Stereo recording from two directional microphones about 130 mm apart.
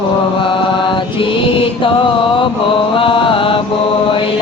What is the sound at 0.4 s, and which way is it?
Mantra, 40° left (ahead or behind).